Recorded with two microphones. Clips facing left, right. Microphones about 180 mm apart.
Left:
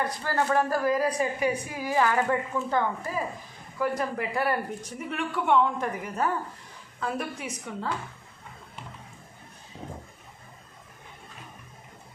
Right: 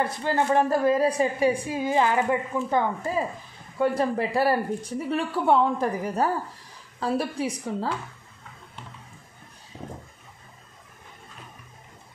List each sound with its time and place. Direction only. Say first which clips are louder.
0.0 s a woman's voice: right 3 dB; 20° right (ahead or behind)
3.7 s speech: right 5 dB; 30° right (ahead or behind)